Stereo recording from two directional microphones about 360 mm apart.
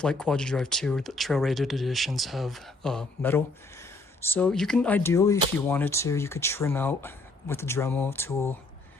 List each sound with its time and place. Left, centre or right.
0.0 s speech: centre